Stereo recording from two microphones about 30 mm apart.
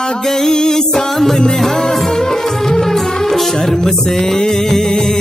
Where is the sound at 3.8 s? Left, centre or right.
Centre.